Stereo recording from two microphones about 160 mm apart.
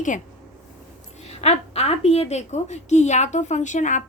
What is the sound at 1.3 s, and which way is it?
A woman's voice, 40° left (ahead or behind).